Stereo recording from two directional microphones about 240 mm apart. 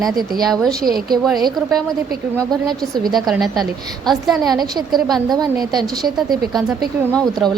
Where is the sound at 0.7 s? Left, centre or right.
Right.